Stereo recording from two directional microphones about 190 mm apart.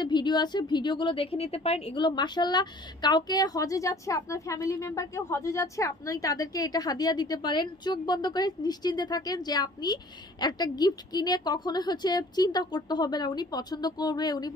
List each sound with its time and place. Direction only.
0.0 s a woman's voice: 25° left (ahead or behind)